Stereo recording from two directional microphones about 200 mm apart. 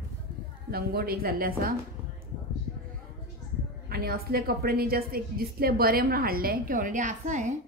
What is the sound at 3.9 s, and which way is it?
A woman's voice, 50° right (ahead or behind).